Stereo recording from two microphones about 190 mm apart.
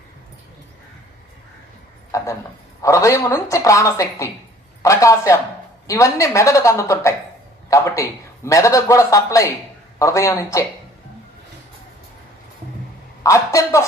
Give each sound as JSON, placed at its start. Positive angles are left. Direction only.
{"t": 2.1, "sound": "speech", "side_deg": 15}
{"t": 7.7, "sound": "a sound", "side_deg": 15}
{"t": 8.4, "sound": "speech", "side_deg": 15}
{"t": 13.2, "sound": "a woman's voice", "side_deg": 15}